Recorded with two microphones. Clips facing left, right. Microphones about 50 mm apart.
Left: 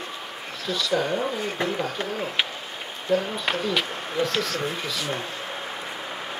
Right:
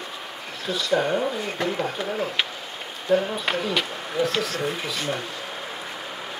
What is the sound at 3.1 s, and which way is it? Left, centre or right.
Speech, right.